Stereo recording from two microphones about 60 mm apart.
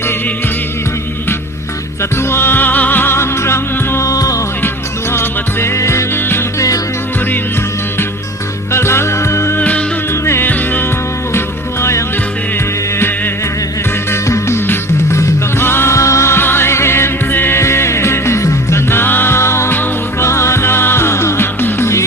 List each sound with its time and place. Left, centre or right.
2.0 s music: left
4.0 s music: left
5.1 s music: left
6.1 s music: left
8.7 s music: left
9.6 s music: left
10.1 s music: left
10.5 s music: left
11.3 s music: left
13.0 s music: left
14.1 s music: left
16.0 s music: left
19.7 s music: left
20.2 s music: left